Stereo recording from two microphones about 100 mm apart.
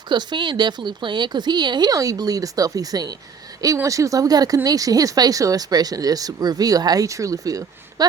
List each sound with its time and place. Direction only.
0.1 s speech: 50° right (ahead or behind)